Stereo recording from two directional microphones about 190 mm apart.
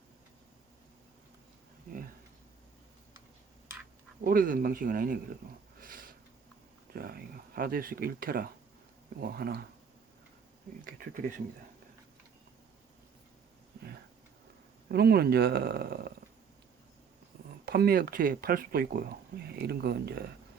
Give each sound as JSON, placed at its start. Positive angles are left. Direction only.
{"t": 4.2, "sound": "speech", "side_deg": -50}
{"t": 5.8, "sound": "sniff", "side_deg": -45}
{"t": 6.9, "sound": "speech", "side_deg": -50}
{"t": 10.8, "sound": "speech", "side_deg": -45}
{"t": 14.8, "sound": "speech", "side_deg": -55}
{"t": 17.7, "sound": "speech", "side_deg": -50}